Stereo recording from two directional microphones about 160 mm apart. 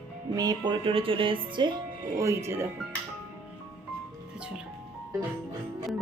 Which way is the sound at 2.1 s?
15° right (ahead or behind).